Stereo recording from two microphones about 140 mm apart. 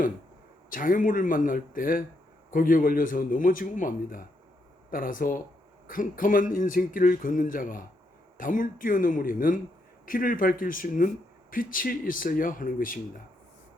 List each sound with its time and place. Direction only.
0.7 s a man's voice: 75° left (ahead or behind)